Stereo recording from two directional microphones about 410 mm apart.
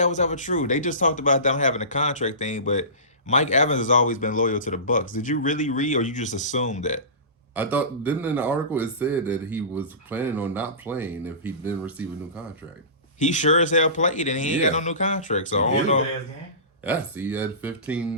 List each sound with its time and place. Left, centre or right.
0.0 s speech: centre
7.5 s speech: centre
13.1 s speech: centre
16.8 s speech: centre